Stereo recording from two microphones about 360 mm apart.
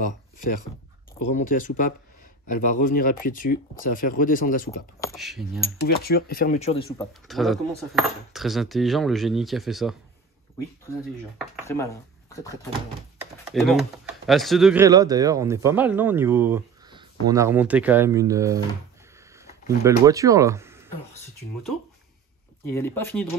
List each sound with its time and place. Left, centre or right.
1.3 s speech: left
5.0 s speech: centre
6.0 s speech: left
7.2 s speech: centre
11.6 s speech: centre
22.7 s speech: centre